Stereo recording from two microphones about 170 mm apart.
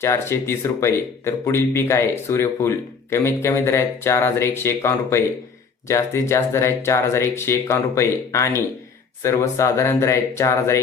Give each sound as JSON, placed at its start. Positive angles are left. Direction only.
{"t": 0.0, "sound": "speech", "side_deg": 15}